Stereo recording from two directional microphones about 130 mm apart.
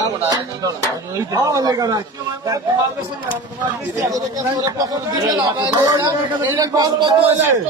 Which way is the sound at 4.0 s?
25° right (ahead or behind).